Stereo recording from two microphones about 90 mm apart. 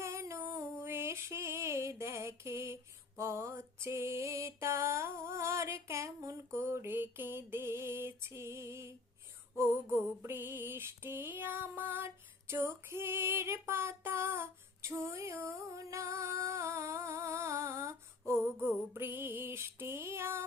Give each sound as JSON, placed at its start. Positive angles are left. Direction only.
{"t": 0.0, "sound": "female singing", "side_deg": -30}
{"t": 3.2, "sound": "mantra", "side_deg": -30}
{"t": 9.6, "sound": "female singing", "side_deg": -25}